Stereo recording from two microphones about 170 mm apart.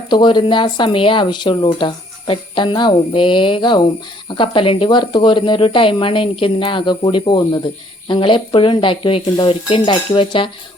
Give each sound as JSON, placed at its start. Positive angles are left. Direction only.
{"t": 0.1, "sound": "speech", "side_deg": 25}